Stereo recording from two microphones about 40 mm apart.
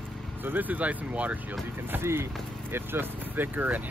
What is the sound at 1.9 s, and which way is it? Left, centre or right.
Speech, right.